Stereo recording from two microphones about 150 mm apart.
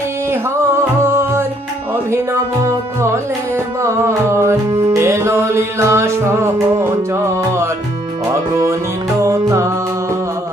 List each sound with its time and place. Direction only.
0.3 s music: 15° right (ahead or behind)
4.7 s music: 35° right (ahead or behind)
4.9 s music: 20° right (ahead or behind)
9.2 s music: 20° right (ahead or behind)